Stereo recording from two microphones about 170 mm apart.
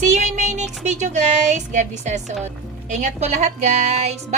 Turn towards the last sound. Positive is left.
turn(degrees=-40)  # may be behind; listen again after turning